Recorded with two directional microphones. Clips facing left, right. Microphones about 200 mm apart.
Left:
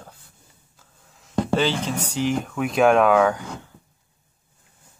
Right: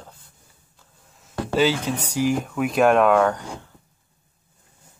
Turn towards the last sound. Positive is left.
turn(degrees=0)  # may be behind; listen again after turning